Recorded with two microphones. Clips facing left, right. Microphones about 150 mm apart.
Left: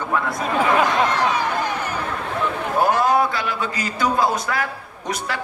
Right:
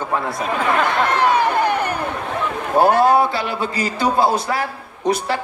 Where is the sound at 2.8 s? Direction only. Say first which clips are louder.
Right 4 dB; 30° right (ahead or behind).